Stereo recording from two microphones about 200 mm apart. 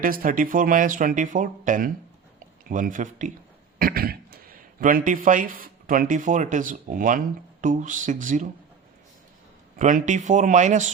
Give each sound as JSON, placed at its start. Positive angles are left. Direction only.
{"t": 0.0, "sound": "a man's voice", "side_deg": -45}
{"t": 9.7, "sound": "speech", "side_deg": -40}